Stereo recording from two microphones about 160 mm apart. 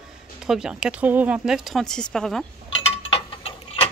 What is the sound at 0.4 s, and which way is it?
Speech, 5° right (ahead or behind).